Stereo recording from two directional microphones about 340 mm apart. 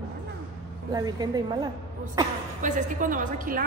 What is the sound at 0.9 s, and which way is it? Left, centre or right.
Speech, centre.